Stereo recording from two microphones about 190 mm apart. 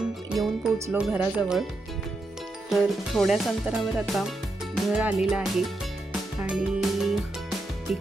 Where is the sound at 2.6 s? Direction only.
Centre (ahead or behind).